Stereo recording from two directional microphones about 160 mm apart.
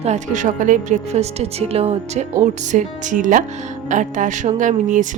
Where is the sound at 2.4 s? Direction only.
50° right (ahead or behind).